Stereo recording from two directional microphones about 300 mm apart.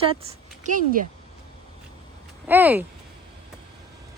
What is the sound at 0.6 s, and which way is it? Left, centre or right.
Speech, right.